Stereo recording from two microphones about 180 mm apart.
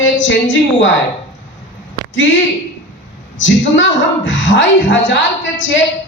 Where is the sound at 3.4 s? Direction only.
90° left.